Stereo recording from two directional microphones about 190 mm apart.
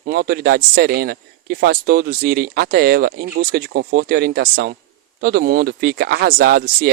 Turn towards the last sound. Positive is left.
turn(degrees=-55)  # may be behind; listen again after turning